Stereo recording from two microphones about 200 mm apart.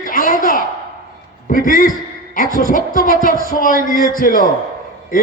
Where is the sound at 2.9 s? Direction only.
45° left (ahead or behind).